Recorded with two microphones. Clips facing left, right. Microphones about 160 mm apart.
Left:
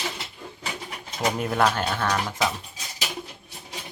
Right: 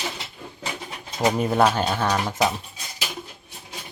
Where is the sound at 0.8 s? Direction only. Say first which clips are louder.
Right 4 dB; 25° right (ahead or behind).